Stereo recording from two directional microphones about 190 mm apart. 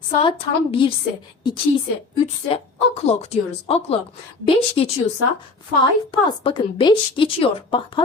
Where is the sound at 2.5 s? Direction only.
30° left (ahead or behind).